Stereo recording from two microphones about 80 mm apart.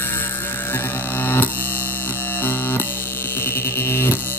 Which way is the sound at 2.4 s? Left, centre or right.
Left.